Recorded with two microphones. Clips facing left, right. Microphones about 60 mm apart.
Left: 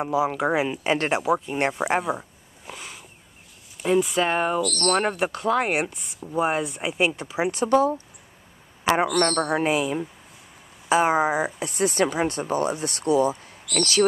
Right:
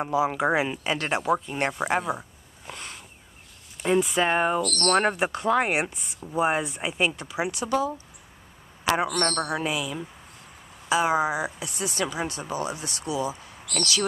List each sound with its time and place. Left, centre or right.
0.0 s speech: centre
1.1 s speech: centre
4.6 s speech: right
4.9 s speech: centre
7.1 s speech: left
7.5 s speech: left
8.9 s speech: left